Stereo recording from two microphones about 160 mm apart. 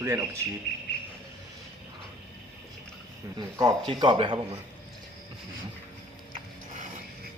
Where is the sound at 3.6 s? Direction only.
25° right (ahead or behind).